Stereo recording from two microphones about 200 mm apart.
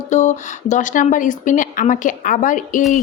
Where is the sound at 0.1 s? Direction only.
35° left (ahead or behind).